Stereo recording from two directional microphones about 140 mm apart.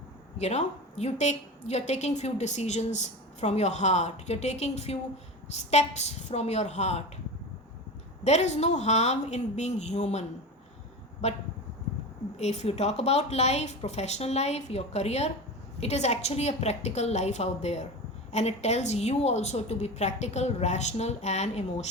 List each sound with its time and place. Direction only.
0.3 s a woman's voice: 50° left (ahead or behind)
8.2 s a woman's voice: 55° left (ahead or behind)
12.4 s a woman's voice: 55° left (ahead or behind)